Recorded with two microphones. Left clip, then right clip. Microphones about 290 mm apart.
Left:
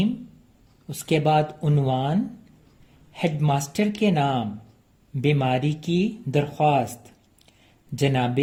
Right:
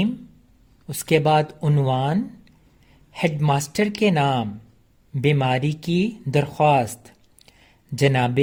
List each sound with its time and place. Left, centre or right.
0.9 s speech: right